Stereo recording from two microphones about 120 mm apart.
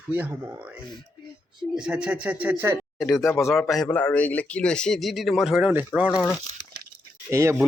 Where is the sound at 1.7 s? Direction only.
5° right (ahead or behind).